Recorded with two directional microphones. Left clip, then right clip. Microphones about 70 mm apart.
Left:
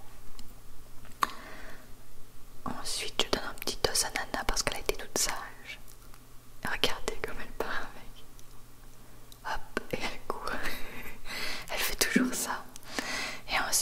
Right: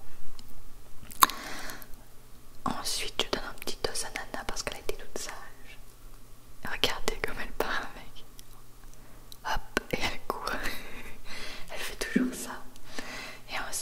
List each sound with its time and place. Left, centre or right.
1.2 s a sound: right
2.6 s whispering: right
3.0 s whispering: centre
4.9 s whispering: left
6.9 s whispering: centre
9.4 s whispering: centre
10.7 s whispering: centre
11.2 s whispering: left